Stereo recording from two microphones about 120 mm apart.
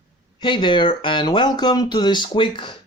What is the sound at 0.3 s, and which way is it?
Speech, 40° left (ahead or behind).